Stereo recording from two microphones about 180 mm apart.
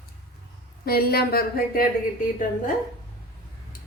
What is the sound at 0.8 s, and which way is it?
Speech, 60° left (ahead or behind).